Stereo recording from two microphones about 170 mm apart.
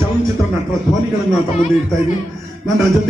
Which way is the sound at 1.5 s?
40° left (ahead or behind).